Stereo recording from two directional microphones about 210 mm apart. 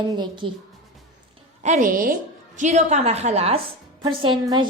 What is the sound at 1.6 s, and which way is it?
A woman's voice, 35° right (ahead or behind).